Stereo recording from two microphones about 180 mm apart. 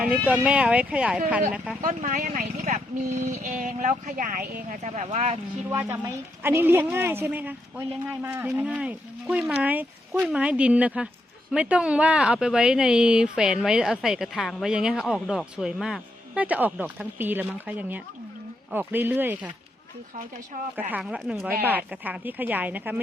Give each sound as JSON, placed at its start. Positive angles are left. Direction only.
{"t": 0.3, "sound": "a woman's voice", "side_deg": -5}
{"t": 1.8, "sound": "speech", "side_deg": -45}
{"t": 5.7, "sound": "a woman's voice", "side_deg": -15}
{"t": 20.7, "sound": "a woman's voice", "side_deg": -5}